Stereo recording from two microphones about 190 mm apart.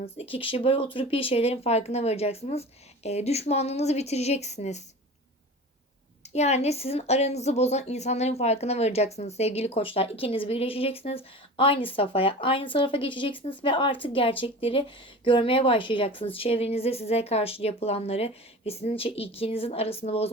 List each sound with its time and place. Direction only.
0.0 s a woman's voice: 30° left (ahead or behind)
6.3 s a woman's voice: 35° left (ahead or behind)